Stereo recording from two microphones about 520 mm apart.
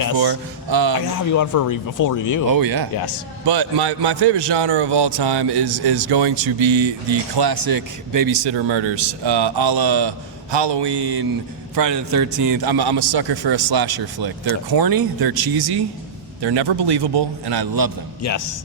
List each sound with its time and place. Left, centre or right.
0.2 s speech: right
1.3 s speech: left
2.5 s a man's voice: right
18.2 s speech: left